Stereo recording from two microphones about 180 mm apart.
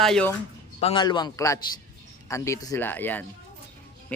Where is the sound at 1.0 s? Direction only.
20° left (ahead or behind).